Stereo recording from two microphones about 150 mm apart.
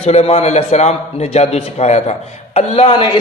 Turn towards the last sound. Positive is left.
turn(degrees=40)  # may be behind; listen again after turning